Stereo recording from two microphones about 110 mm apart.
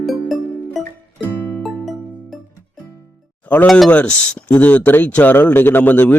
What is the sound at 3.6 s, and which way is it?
Speech, centre (ahead or behind).